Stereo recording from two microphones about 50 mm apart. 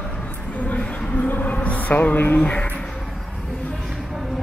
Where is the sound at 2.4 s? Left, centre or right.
Left.